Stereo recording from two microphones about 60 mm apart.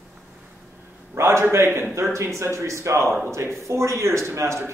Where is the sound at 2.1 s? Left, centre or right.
Right.